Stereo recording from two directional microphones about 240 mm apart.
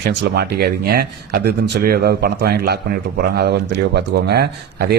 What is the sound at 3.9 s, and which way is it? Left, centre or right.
Speech, right.